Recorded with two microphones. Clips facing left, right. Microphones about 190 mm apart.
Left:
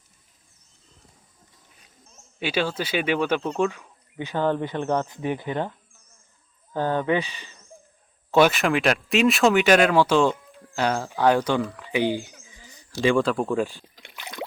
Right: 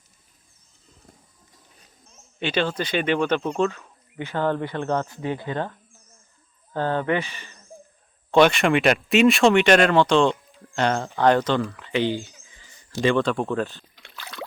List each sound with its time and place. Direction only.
2.0 s speech: 5° left (ahead or behind)
6.7 s speech: 10° left (ahead or behind)
14.0 s a sound: 15° left (ahead or behind)